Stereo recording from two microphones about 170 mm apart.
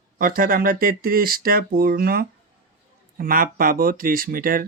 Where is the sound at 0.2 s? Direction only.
55° right (ahead or behind).